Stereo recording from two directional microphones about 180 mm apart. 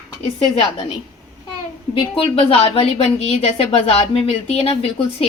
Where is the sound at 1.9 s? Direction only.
30° left (ahead or behind).